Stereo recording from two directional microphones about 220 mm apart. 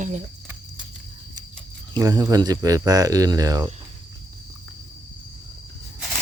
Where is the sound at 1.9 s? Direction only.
15° right (ahead or behind).